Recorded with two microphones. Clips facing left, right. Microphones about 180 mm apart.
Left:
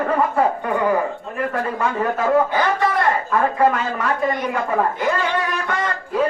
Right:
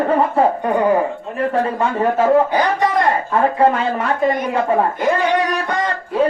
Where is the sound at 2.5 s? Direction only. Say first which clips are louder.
Right 3 dB; 15° right (ahead or behind).